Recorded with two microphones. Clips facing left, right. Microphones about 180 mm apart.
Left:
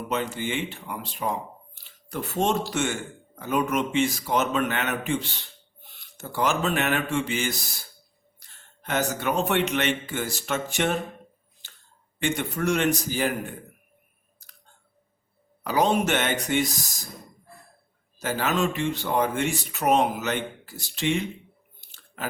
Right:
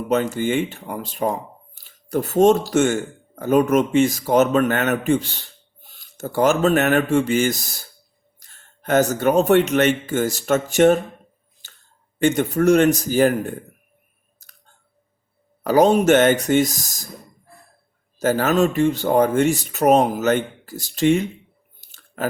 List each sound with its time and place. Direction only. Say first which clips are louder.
0.1 s speech: right 9 dB; 45° right (ahead or behind)
11.6 s a sound: right 2 dB; 45° right (ahead or behind)
12.2 s speech: right 9 dB; 45° right (ahead or behind)
15.6 s speech: right 8 dB; 45° right (ahead or behind)
18.2 s speech: right 8 dB; 45° right (ahead or behind)
21.8 s a sound: right 9 dB; 45° right (ahead or behind)